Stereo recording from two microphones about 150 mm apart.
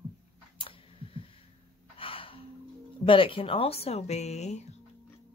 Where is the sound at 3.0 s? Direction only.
35° left (ahead or behind).